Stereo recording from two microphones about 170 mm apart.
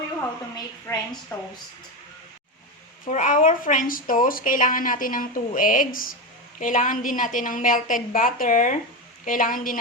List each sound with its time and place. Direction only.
0.9 s a woman's voice: 10° left (ahead or behind)
3.1 s a woman's voice: 45° left (ahead or behind)